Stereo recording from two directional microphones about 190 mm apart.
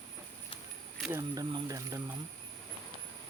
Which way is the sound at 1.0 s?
10° right (ahead or behind).